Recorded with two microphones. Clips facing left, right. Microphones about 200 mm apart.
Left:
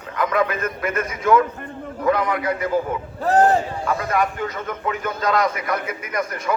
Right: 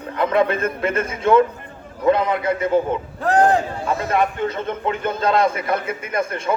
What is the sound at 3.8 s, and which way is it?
A man's voice, 25° right (ahead or behind).